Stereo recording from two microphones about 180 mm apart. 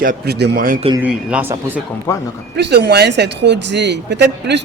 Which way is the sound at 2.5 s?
70° right (ahead or behind).